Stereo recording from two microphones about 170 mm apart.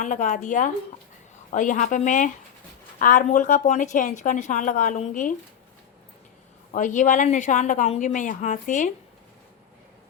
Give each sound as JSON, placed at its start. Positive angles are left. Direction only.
{"t": 0.0, "sound": "a woman's voice", "side_deg": 50}
{"t": 6.7, "sound": "a woman's voice", "side_deg": 50}